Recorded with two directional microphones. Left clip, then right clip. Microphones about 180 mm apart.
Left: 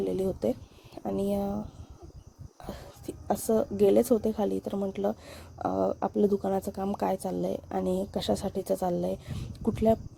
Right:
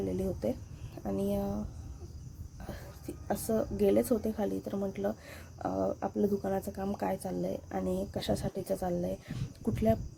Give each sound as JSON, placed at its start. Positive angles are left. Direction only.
{"t": 0.0, "sound": "a woman's voice", "side_deg": 40}
{"t": 3.2, "sound": "a woman's voice", "side_deg": 35}